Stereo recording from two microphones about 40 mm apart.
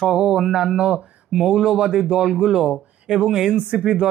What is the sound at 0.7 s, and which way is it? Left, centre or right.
Speech, right.